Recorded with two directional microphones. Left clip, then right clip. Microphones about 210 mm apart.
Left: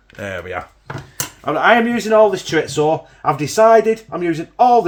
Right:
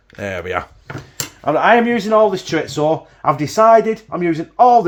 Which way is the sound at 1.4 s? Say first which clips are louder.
Right 1 dB; 45° right (ahead or behind).